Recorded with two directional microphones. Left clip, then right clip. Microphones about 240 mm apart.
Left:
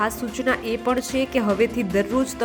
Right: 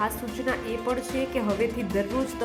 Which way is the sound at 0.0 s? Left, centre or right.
Centre.